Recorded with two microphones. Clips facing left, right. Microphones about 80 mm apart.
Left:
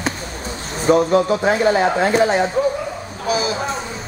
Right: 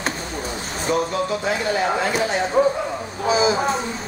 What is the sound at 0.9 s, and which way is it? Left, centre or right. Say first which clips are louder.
Speech: left 7 dB; left.